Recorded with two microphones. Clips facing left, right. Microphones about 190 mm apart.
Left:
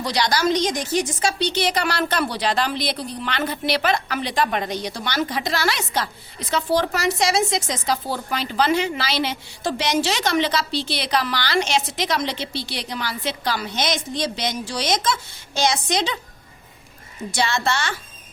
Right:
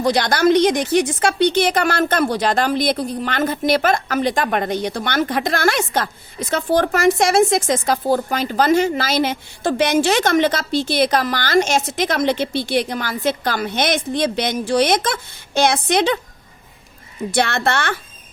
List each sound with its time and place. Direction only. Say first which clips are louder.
0.0 s a woman's voice: right 6 dB; 50° right (ahead or behind)
17.3 s a woman's voice: right 4 dB; 60° right (ahead or behind)